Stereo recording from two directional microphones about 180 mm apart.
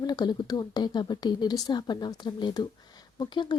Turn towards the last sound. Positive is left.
turn(degrees=25)  # may be behind; listen again after turning